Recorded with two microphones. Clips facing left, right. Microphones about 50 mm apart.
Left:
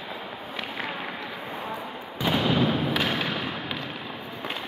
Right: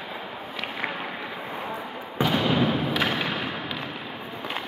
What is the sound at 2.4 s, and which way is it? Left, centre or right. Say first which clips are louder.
Fireworks: left 1 dB; right.